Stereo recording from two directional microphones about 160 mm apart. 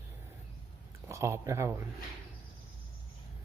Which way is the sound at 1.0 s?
20° right (ahead or behind).